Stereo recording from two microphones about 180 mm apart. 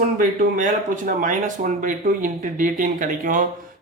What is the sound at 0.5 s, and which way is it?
Speech, 50° right (ahead or behind).